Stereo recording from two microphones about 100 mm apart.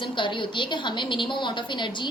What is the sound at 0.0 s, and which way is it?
A child's voice, 55° left (ahead or behind).